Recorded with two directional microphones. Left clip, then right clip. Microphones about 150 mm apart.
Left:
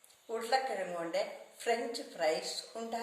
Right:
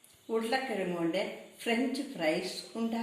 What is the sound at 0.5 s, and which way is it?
A woman's voice, 5° left (ahead or behind).